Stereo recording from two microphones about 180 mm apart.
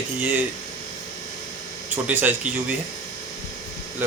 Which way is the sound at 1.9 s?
10° right (ahead or behind).